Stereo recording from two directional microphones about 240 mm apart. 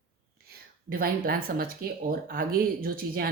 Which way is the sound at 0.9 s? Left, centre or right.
Right.